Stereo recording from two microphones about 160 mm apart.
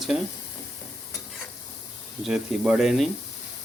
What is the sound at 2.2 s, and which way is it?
Stir, 5° right (ahead or behind).